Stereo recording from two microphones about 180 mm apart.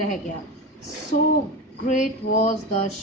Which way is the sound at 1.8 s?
40° left (ahead or behind).